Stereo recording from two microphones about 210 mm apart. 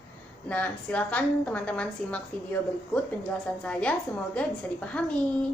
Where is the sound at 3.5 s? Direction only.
5° left (ahead or behind).